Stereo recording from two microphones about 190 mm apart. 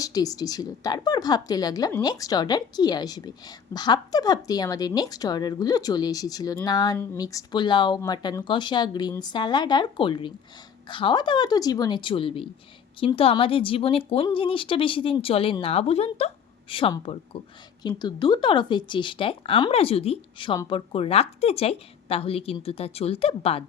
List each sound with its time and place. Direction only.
0.0 s speech: 20° left (ahead or behind)